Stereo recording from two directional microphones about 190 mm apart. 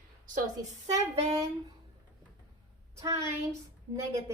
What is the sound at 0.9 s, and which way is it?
Speech, 35° right (ahead or behind).